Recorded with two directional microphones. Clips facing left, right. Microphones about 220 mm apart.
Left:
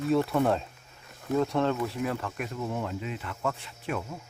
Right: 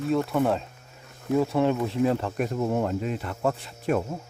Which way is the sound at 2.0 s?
35° right (ahead or behind).